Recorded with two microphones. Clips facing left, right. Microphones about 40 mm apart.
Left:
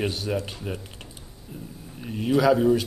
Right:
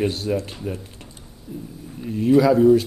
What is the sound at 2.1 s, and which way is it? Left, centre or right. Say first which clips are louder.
Speech: right 4 dB; left.